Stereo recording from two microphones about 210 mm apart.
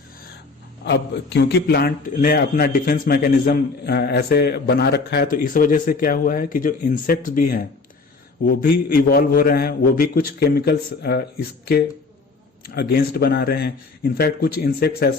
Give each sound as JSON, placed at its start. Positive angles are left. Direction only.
{"t": 0.9, "sound": "a man's voice", "side_deg": 55}